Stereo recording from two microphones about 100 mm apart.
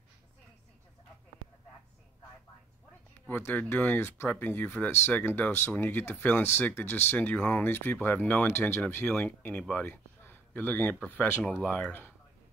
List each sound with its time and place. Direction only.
3.3 s speech: 20° left (ahead or behind)